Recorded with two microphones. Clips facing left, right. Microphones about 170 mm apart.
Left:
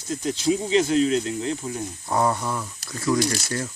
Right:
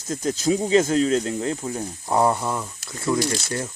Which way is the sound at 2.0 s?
15° right (ahead or behind).